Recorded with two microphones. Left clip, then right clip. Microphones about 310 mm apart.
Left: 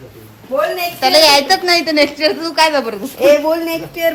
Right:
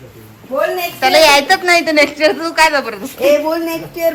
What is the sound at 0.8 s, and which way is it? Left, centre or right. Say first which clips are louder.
A woman's voice: right 1 dB; centre.